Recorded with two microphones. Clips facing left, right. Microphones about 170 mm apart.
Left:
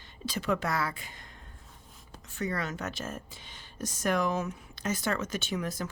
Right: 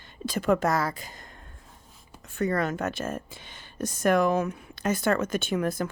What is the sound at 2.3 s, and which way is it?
Speech, 50° right (ahead or behind).